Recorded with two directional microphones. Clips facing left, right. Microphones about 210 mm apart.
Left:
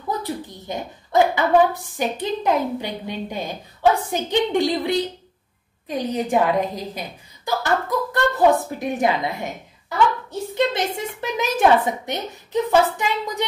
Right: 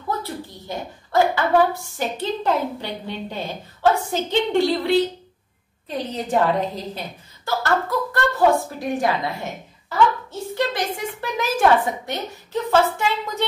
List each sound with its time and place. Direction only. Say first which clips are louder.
0.2 s a woman's voice: left 3 dB; 15° left (ahead or behind)
10.5 s a sound: left 2 dB; 20° left (ahead or behind)
11.0 s a woman's voice: left 1 dB; 20° left (ahead or behind)